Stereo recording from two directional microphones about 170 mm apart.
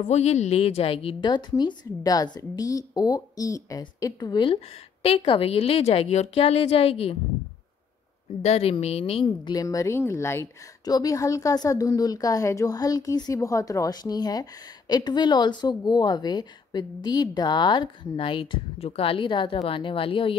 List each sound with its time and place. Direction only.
0.0 s a woman's voice: 40° left (ahead or behind)
8.4 s speech: 40° left (ahead or behind)